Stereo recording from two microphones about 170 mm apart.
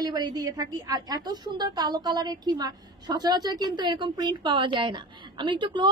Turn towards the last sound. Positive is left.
turn(degrees=-30)  # may be behind; listen again after turning